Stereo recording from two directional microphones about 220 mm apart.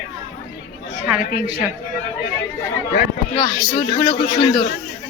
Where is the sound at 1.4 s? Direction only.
25° right (ahead or behind).